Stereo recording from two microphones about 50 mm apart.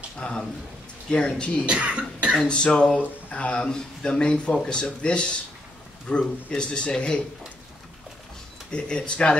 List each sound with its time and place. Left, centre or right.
0.2 s speech: centre
1.7 s speech: right
2.4 s speech: centre
8.7 s speech: centre